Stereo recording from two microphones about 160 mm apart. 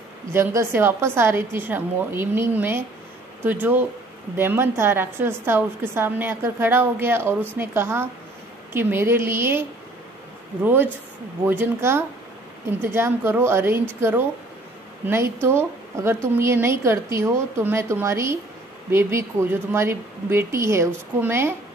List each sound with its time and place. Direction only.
0.3 s a woman's voice: 15° right (ahead or behind)
15.0 s a woman's voice: 15° right (ahead or behind)